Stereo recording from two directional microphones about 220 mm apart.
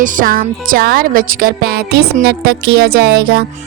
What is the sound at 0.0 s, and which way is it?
Speech, 40° right (ahead or behind).